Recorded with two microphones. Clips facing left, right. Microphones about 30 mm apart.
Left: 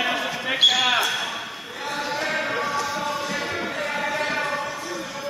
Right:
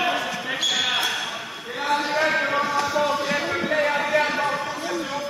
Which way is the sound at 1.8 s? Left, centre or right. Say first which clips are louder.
Right 5 dB; centre.